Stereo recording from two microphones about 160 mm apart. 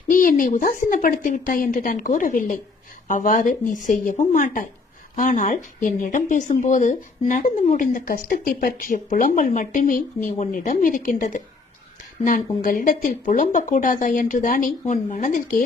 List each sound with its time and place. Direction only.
0.1 s a woman's voice: 60° left (ahead or behind)